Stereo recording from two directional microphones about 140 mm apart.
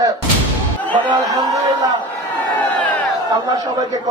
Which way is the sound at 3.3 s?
30° right (ahead or behind).